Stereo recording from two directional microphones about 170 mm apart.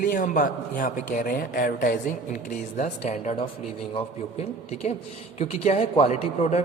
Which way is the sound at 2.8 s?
45° left (ahead or behind).